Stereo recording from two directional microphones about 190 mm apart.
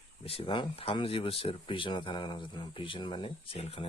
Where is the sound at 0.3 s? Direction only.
30° left (ahead or behind).